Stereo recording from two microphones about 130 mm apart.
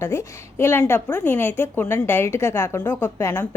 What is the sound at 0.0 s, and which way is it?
A woman's voice, 20° left (ahead or behind).